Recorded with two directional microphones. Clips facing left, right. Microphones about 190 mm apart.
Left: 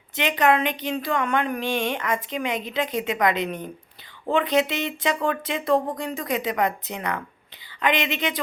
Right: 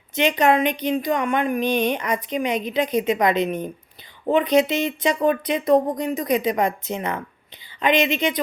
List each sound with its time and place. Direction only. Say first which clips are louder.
0.2 s a woman's voice: right 3 dB; 20° right (ahead or behind)